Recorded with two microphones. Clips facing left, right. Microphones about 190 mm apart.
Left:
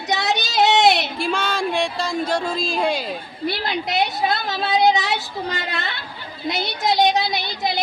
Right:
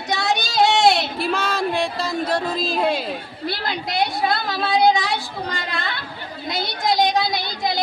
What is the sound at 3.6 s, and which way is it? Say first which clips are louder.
A woman's voice: even; 20° left (ahead or behind).